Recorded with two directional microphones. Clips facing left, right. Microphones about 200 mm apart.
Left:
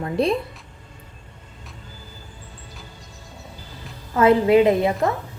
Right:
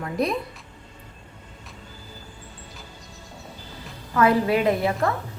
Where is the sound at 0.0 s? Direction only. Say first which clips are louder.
Left 4 dB; 30° left (ahead or behind).